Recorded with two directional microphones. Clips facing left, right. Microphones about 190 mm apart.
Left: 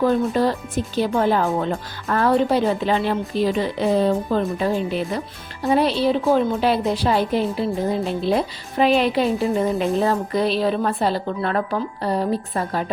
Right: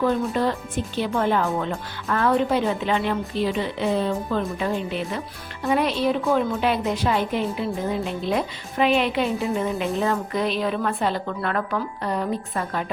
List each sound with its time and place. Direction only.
0.0 s a woman's voice: 35° left (ahead or behind)